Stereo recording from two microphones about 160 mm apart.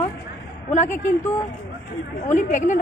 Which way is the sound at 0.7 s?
50° left (ahead or behind).